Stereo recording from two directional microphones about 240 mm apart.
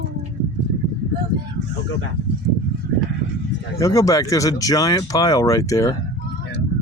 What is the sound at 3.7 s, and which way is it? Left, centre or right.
Speech, centre.